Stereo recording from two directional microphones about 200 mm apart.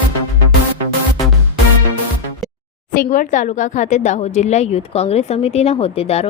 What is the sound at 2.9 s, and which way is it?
A woman's voice, 40° left (ahead or behind).